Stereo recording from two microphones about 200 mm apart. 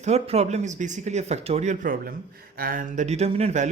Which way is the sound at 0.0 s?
30° right (ahead or behind).